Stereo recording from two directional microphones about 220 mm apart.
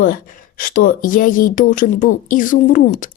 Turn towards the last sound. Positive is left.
turn(degrees=35)  # may be behind; listen again after turning